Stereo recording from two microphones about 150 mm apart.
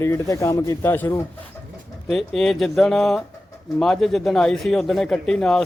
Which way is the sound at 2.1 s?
Centre (ahead or behind).